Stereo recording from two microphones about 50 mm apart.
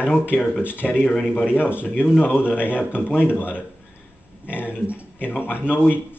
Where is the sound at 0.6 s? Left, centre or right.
Left.